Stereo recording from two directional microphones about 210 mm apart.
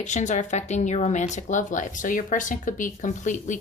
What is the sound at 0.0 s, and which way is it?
Speech, 35° left (ahead or behind).